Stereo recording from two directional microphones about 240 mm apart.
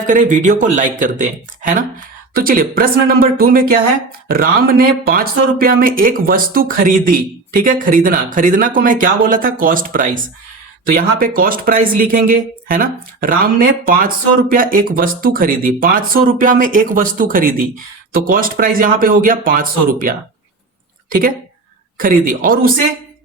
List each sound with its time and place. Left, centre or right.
0.1 s speech: right